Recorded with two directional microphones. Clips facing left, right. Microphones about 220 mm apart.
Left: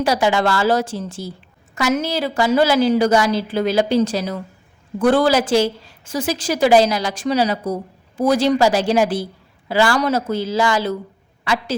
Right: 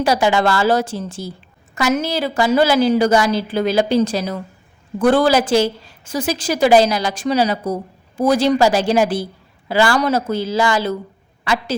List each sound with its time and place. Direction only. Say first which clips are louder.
0.0 s a woman's voice: right 1 dB; 25° right (ahead or behind)